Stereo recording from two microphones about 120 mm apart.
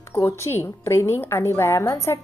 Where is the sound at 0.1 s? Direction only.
25° left (ahead or behind).